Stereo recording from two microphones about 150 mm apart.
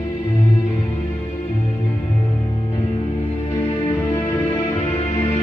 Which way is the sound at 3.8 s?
15° left (ahead or behind).